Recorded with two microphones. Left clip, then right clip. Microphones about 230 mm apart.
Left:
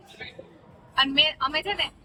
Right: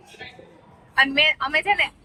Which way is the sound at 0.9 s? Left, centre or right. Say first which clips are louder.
Right 4 dB; centre.